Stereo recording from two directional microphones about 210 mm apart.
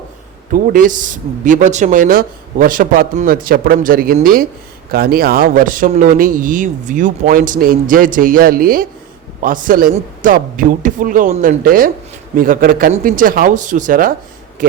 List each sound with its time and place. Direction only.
0.5 s speech: 40° right (ahead or behind)